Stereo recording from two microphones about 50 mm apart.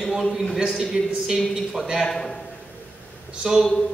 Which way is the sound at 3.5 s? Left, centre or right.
Centre.